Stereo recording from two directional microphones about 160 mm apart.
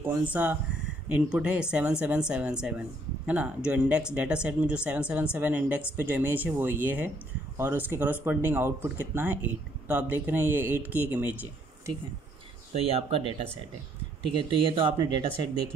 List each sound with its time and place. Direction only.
0.0 s speech: 10° right (ahead or behind)
12.7 s speech: 40° right (ahead or behind)
14.3 s speech: 30° right (ahead or behind)